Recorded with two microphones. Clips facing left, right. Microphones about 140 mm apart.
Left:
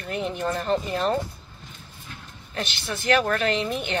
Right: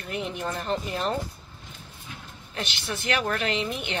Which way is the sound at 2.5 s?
20° right (ahead or behind).